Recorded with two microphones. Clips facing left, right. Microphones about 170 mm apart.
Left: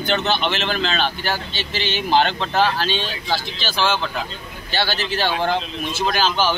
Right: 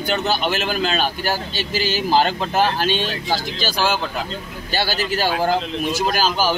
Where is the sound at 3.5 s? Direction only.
40° right (ahead or behind).